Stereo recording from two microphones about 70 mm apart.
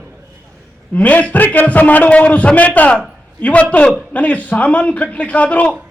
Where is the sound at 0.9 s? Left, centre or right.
Left.